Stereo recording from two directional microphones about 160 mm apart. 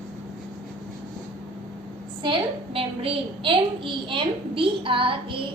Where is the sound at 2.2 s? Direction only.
35° right (ahead or behind).